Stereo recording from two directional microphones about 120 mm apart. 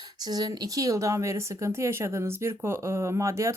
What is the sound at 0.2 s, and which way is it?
Speech, 35° right (ahead or behind).